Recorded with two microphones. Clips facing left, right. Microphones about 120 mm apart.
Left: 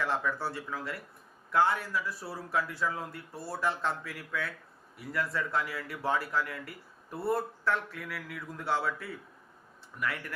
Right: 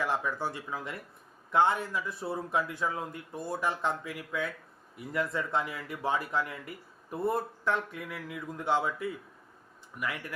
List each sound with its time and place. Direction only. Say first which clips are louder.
0.0 s speech: even; 15° right (ahead or behind)